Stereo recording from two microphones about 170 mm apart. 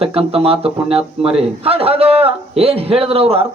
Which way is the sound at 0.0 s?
35° right (ahead or behind).